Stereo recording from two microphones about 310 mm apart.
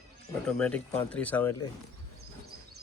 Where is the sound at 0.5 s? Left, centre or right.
Centre.